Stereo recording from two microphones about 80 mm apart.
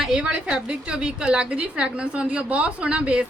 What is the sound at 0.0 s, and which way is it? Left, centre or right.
A woman's voice, centre.